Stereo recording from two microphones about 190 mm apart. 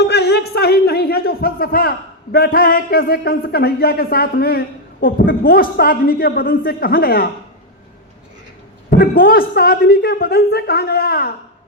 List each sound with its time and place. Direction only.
0.0 s a man's voice: 60° left (ahead or behind)
8.9 s a woman's voice: 50° left (ahead or behind)